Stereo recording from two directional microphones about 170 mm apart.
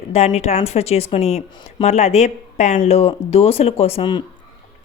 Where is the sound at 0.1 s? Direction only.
40° left (ahead or behind).